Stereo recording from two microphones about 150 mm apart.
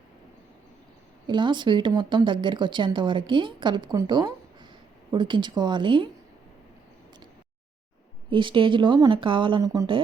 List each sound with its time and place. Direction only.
1.3 s a woman's voice: 30° right (ahead or behind)
4.0 s a sound: 30° right (ahead or behind)
5.1 s a woman's voice: 30° right (ahead or behind)
8.3 s a woman's voice: 35° right (ahead or behind)